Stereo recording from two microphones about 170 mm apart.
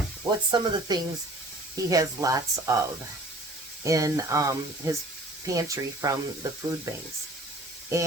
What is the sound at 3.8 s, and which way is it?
Speech, 20° right (ahead or behind).